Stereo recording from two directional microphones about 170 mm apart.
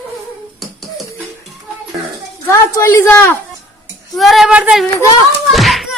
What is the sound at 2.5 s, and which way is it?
Speech, 15° left (ahead or behind).